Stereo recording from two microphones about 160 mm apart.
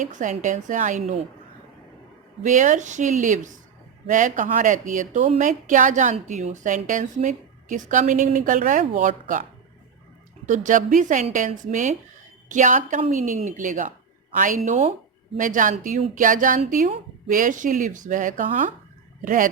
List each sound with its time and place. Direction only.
0.0 s a woman's voice: 50° right (ahead or behind)
2.4 s a woman's voice: 50° right (ahead or behind)
10.4 s a woman's voice: 50° right (ahead or behind)